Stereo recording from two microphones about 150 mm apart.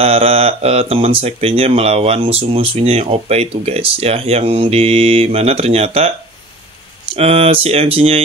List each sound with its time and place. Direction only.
0.0 s speech: 40° right (ahead or behind)
7.2 s speech: 45° right (ahead or behind)